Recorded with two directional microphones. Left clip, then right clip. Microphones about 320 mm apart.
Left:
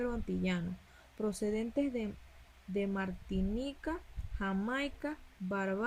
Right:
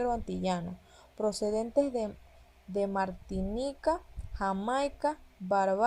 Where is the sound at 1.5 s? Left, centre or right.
Right.